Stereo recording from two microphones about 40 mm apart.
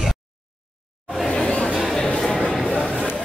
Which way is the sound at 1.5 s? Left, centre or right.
Left.